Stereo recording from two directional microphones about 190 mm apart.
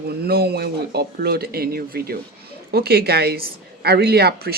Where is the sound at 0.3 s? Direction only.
55° right (ahead or behind).